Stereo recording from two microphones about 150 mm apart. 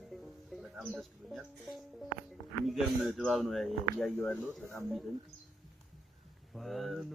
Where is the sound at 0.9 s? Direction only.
Centre (ahead or behind).